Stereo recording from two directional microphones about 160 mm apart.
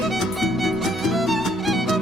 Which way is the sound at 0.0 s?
Centre (ahead or behind).